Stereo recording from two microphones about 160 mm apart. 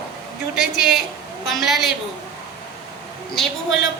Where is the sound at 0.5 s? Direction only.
5° right (ahead or behind).